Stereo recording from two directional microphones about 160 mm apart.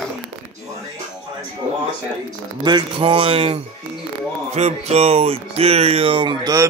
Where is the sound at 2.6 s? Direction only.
30° right (ahead or behind).